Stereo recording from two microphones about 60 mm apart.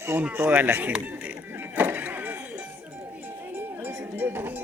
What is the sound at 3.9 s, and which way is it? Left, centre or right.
Sheep, right.